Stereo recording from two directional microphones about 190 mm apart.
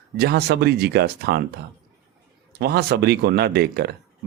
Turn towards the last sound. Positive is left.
turn(degrees=-55)  # may be behind; listen again after turning